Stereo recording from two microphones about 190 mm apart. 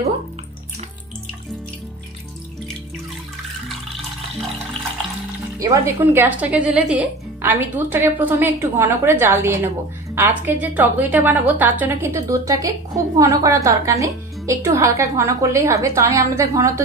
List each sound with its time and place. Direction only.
5.6 s a woman's voice: 15° right (ahead or behind)